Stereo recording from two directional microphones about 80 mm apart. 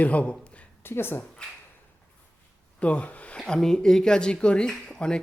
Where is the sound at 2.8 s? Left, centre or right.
Centre.